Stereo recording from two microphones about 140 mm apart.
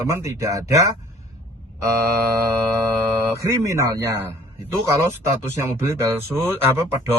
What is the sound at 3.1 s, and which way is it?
Speech, 20° right (ahead or behind).